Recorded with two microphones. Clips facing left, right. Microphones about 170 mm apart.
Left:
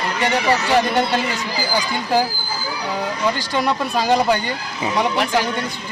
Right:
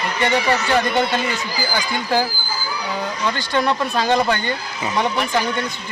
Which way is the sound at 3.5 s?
5° left (ahead or behind).